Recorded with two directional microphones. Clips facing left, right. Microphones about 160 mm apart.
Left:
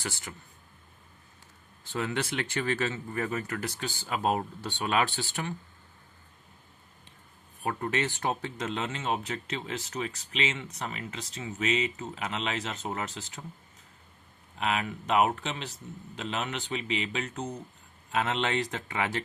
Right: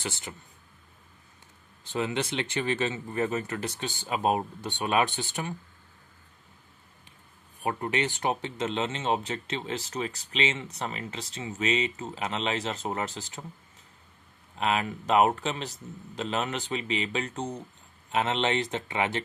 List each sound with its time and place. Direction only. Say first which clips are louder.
0.0 s speech: right 2 dB; 20° right (ahead or behind)
1.8 s speech: right 2 dB; 20° right (ahead or behind)
7.6 s speech: right 1 dB; 20° right (ahead or behind); by 13.4 s 35° right (ahead or behind)
14.6 s speech: right 2 dB; 35° right (ahead or behind)